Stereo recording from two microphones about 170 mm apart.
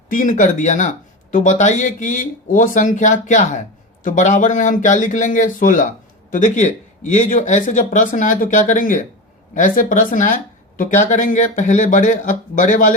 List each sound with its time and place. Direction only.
0.1 s speech: 50° left (ahead or behind)